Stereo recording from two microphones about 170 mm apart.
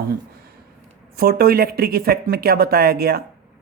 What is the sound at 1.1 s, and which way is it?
Speech, 65° right (ahead or behind).